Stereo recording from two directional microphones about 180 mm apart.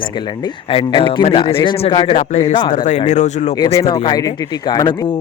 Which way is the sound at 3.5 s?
20° left (ahead or behind).